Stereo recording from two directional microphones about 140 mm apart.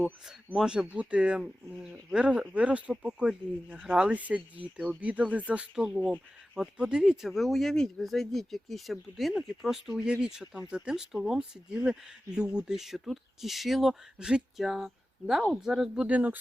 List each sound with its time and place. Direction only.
0.0 s speech: 5° right (ahead or behind)